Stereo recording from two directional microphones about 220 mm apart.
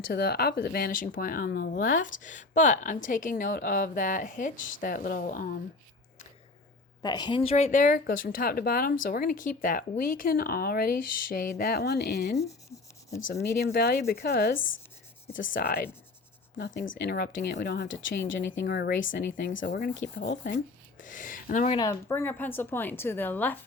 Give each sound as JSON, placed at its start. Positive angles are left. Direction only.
{"t": 0.1, "sound": "speech", "side_deg": 45}
{"t": 7.0, "sound": "speech", "side_deg": 20}
{"t": 19.5, "sound": "speech", "side_deg": 55}
{"t": 21.0, "sound": "speech", "side_deg": 35}
{"t": 21.8, "sound": "a woman's voice", "side_deg": 10}